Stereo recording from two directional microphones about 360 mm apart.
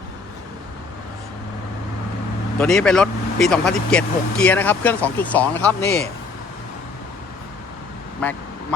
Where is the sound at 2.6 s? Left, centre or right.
Centre.